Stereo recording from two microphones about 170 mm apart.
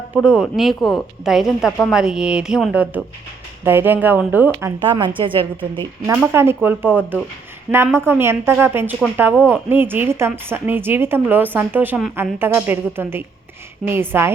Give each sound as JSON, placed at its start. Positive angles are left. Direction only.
{"t": 0.2, "sound": "a woman's voice", "side_deg": -5}
{"t": 4.8, "sound": "a woman's voice", "side_deg": -30}
{"t": 6.3, "sound": "a woman's voice", "side_deg": -15}